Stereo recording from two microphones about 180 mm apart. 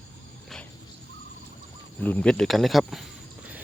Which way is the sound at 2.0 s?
10° left (ahead or behind).